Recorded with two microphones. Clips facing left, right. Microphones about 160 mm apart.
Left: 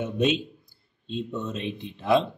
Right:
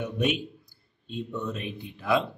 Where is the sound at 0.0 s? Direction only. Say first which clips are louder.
Left 3 dB; 20° left (ahead or behind).